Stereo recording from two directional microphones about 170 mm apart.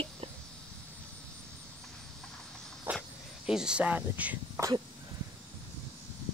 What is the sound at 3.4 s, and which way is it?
Speech, 5° right (ahead or behind).